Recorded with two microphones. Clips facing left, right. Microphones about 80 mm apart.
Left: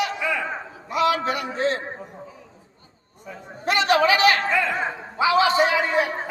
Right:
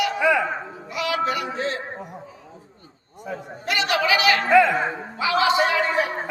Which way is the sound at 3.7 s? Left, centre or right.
Left.